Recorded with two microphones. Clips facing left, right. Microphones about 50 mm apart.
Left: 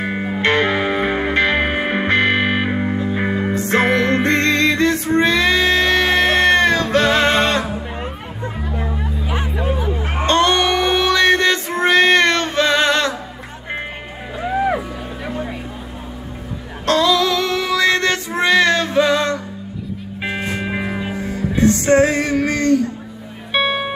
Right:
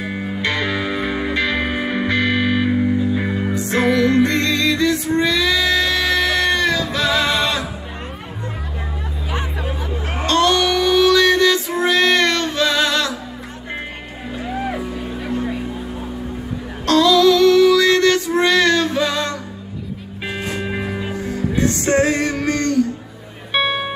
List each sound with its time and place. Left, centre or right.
0.0 s music: left
9.3 s music: centre
10.2 s music: left
14.4 s music: centre
16.8 s child singing: centre
20.2 s music: centre